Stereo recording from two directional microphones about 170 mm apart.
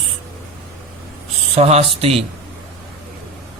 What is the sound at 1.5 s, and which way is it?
Speech, 35° right (ahead or behind).